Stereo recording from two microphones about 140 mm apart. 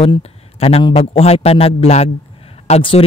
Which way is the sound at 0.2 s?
45° left (ahead or behind).